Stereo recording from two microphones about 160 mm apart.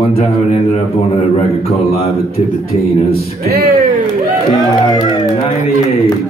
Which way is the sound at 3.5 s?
75° right (ahead or behind).